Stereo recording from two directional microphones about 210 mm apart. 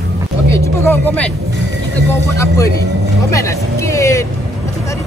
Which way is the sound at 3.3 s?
15° left (ahead or behind).